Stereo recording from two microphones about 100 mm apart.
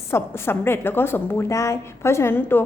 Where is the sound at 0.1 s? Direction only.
25° left (ahead or behind).